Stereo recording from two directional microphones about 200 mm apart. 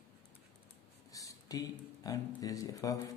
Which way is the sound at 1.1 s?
15° left (ahead or behind).